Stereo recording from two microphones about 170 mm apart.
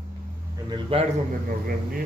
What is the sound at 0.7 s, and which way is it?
Speech, 35° right (ahead or behind).